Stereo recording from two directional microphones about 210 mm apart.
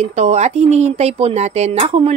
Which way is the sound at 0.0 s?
35° right (ahead or behind).